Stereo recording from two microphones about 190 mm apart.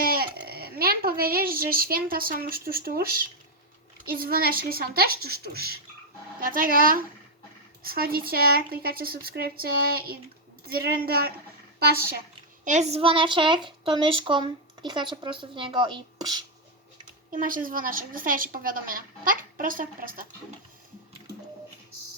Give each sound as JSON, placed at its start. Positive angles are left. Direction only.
{"t": 0.0, "sound": "speech", "side_deg": -50}
{"t": 4.1, "sound": "speech", "side_deg": -50}
{"t": 12.6, "sound": "a woman's voice", "side_deg": -40}
{"t": 17.1, "sound": "speech", "side_deg": -45}